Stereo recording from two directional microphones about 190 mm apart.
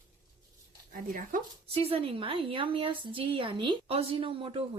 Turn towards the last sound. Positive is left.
turn(degrees=-30)  # may be behind; listen again after turning